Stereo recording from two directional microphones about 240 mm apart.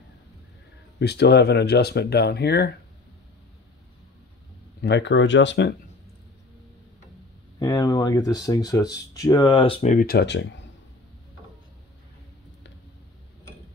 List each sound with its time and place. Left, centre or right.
0.9 s speech: left
4.8 s speech: left
7.5 s speech: centre; by 10.7 s left